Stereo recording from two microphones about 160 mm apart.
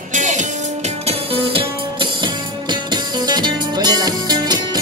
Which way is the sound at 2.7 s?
25° right (ahead or behind).